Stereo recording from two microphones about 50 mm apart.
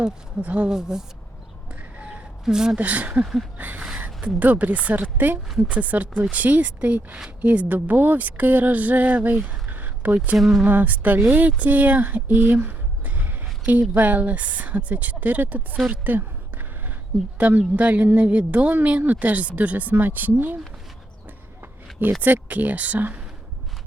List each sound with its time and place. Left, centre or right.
0.4 s speech: right
0.7 s speech: centre
2.4 s speech: centre
2.7 s a woman's voice: right
10.3 s speech: centre
10.7 s a woman's voice: right
15.9 s a sound: right
17.3 s a woman's voice: right
22.2 s a woman's voice: right